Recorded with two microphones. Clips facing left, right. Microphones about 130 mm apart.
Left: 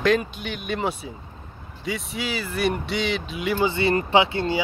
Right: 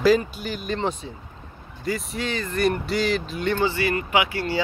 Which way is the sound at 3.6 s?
20° left (ahead or behind).